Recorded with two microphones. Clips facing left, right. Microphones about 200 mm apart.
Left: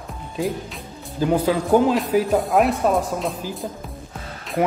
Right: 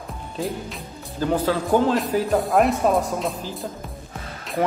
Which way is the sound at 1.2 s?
10° left (ahead or behind).